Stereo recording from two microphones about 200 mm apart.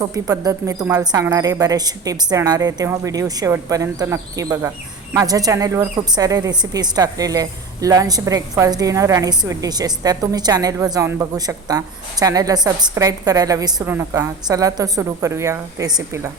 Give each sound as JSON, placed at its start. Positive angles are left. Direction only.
{"t": 0.0, "sound": "a woman's voice", "side_deg": -15}